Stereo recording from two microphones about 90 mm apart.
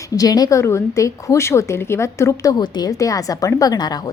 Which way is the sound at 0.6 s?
30° left (ahead or behind).